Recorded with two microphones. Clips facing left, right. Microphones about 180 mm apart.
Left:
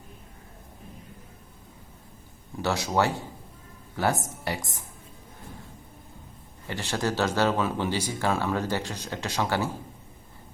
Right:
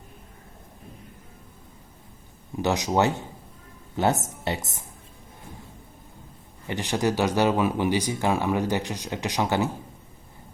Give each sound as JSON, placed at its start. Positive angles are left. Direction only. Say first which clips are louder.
{"t": 2.6, "sound": "speech", "louder": "right 3 dB", "side_deg": -15}
{"t": 6.7, "sound": "speech", "louder": "right 4 dB", "side_deg": -15}